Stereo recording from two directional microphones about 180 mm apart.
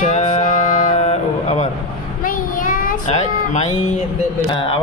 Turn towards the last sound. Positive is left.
turn(degrees=45)  # may be behind; listen again after turning